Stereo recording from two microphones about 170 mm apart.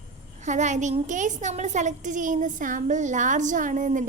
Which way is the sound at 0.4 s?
45° right (ahead or behind).